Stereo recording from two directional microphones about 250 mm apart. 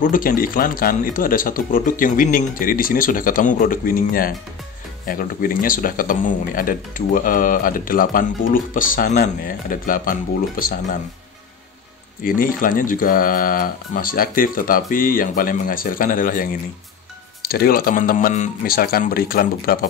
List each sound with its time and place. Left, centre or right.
0.0 s speech: left
12.2 s speech: left